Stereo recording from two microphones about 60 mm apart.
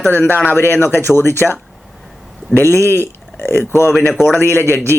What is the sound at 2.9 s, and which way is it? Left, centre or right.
Speech, left.